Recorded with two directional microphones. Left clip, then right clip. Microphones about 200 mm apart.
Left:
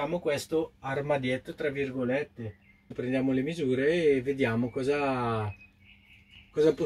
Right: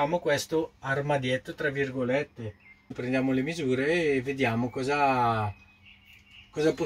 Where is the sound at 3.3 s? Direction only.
15° right (ahead or behind).